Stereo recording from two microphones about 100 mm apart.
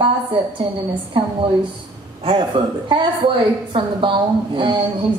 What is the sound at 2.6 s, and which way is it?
Speech, 55° right (ahead or behind).